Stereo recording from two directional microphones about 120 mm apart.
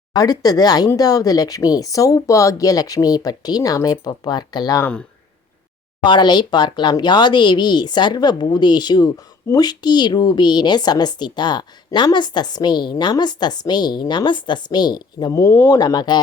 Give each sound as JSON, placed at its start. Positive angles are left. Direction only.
{"t": 0.1, "sound": "speech", "side_deg": 30}
{"t": 4.8, "sound": "speech", "side_deg": 10}
{"t": 6.0, "sound": "speech", "side_deg": 40}
{"t": 15.3, "sound": "speech", "side_deg": 25}
{"t": 15.8, "sound": "speech", "side_deg": 35}